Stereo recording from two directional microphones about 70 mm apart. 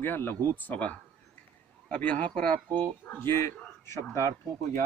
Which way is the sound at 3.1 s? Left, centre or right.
Left.